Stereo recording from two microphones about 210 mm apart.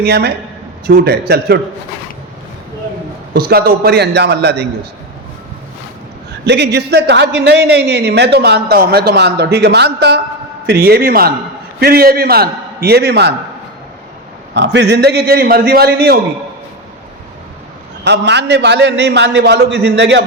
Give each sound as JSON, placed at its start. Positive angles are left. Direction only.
{"t": 0.0, "sound": "a man's voice", "side_deg": -50}
{"t": 3.3, "sound": "a man's voice", "side_deg": -45}
{"t": 6.4, "sound": "a man's voice", "side_deg": -55}
{"t": 14.5, "sound": "a man's voice", "side_deg": -55}
{"t": 18.0, "sound": "a man's voice", "side_deg": -55}